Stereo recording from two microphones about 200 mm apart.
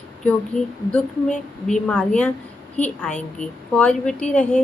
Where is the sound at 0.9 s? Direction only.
5° left (ahead or behind).